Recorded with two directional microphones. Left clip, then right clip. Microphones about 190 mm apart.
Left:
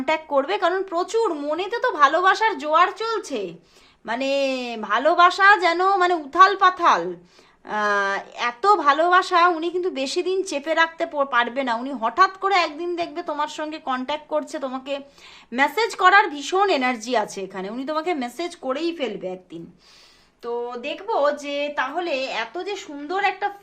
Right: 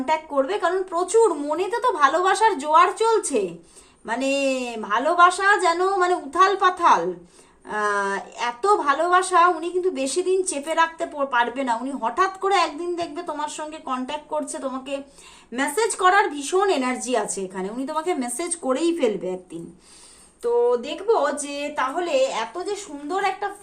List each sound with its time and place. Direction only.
0.0 s a woman's voice: 45° left (ahead or behind); by 3.4 s 25° left (ahead or behind)
4.0 s a woman's voice: 35° left (ahead or behind)
20.4 s a woman's voice: 30° left (ahead or behind); by 23.5 s 50° left (ahead or behind)